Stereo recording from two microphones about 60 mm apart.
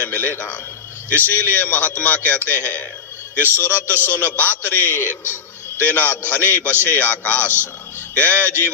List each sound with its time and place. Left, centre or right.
0.0 s a man's voice: left